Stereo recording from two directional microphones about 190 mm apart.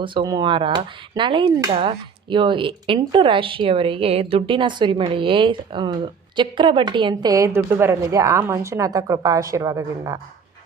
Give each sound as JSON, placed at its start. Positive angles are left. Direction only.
{"t": 0.0, "sound": "speech", "side_deg": -25}